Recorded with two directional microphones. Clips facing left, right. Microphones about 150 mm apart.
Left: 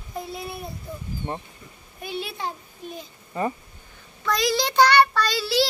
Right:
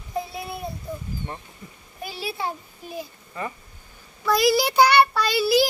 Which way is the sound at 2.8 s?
5° right (ahead or behind).